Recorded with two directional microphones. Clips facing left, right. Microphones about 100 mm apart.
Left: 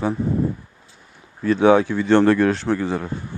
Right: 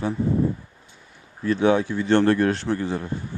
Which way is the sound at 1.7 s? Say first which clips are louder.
Left 4 dB; 90° left.